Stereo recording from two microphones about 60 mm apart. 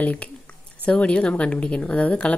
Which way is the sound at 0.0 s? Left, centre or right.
Left.